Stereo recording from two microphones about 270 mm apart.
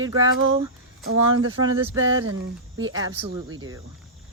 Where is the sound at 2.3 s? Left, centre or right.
Centre.